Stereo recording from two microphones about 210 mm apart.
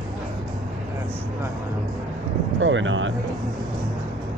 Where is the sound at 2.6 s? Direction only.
65° right (ahead or behind).